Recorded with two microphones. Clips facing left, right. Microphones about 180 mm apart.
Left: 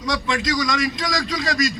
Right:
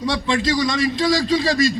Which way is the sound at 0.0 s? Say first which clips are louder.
Right 3 dB; 30° right (ahead or behind).